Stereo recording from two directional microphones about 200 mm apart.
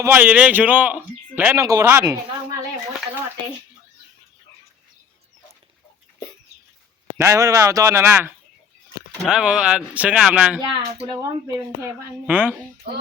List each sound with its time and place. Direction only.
0.0 s a man's voice: 10° right (ahead or behind)
7.2 s a man's voice: 15° right (ahead or behind)